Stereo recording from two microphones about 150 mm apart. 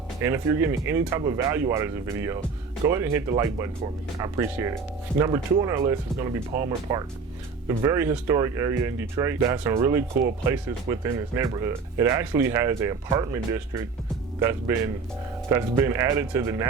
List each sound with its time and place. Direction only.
0.2 s speech: 15° right (ahead or behind)